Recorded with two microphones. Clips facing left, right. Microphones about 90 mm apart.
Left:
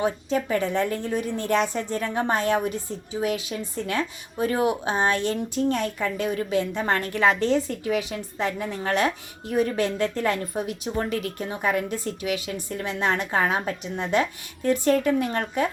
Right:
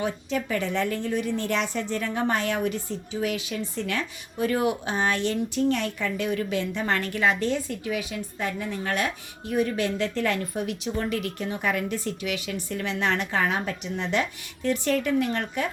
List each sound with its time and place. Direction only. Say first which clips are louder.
0.0 s speech: left 3 dB; 35° left (ahead or behind)